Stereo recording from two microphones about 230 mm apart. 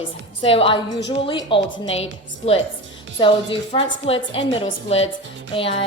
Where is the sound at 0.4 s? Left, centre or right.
Left.